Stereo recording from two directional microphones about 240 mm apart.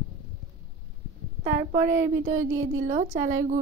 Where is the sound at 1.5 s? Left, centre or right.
Right.